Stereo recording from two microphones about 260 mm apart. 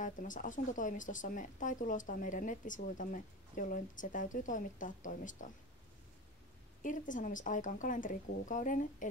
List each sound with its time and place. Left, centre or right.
0.0 s speech: left
6.8 s speech: left